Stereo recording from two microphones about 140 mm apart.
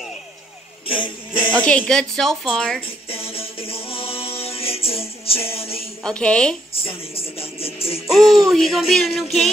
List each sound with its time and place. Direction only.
0.8 s music: 35° left (ahead or behind)
1.6 s music: 10° left (ahead or behind)
3.1 s music: 40° left (ahead or behind)
6.0 s music: 5° left (ahead or behind)
6.7 s music: 40° left (ahead or behind)
8.1 s music: centre (ahead or behind)